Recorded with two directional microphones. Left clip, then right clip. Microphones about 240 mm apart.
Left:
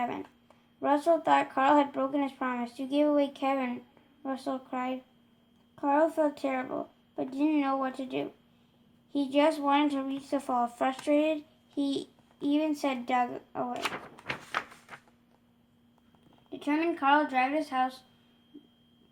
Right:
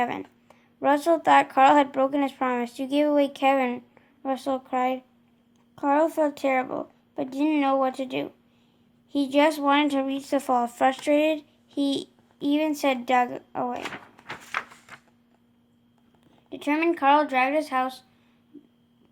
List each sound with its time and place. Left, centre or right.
0.0 s speech: right
14.3 s a sound: centre
16.5 s speech: right